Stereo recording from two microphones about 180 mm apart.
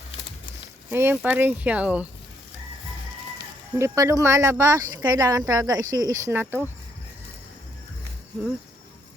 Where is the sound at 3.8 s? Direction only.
15° right (ahead or behind).